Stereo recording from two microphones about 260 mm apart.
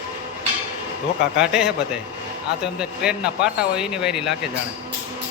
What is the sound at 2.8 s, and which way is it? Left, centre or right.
Speech, centre.